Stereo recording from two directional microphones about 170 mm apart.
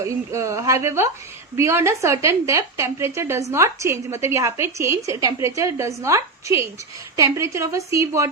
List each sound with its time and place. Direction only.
0.0 s a woman's voice: 15° right (ahead or behind)